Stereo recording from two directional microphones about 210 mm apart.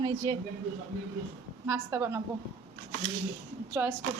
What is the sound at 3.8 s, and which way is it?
Speech, 10° right (ahead or behind).